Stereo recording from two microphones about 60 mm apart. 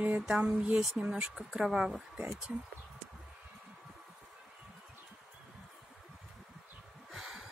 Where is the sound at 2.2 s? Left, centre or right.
Right.